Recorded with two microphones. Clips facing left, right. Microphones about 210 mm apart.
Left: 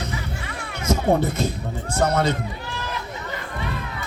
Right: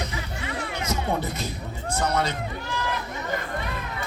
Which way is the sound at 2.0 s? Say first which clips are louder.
Left 5 dB; 55° left (ahead or behind).